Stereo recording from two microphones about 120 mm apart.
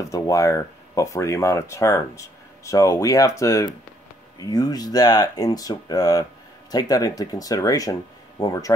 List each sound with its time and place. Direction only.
0.0 s speech: 30° left (ahead or behind)